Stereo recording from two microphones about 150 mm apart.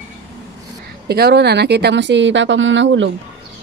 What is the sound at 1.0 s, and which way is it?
Speech, 90° right.